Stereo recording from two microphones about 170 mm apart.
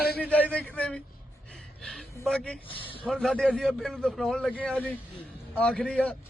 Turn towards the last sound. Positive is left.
turn(degrees=5)  # may be behind; listen again after turning